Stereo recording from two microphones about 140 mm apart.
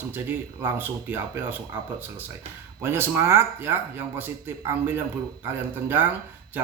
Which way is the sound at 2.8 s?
15° right (ahead or behind).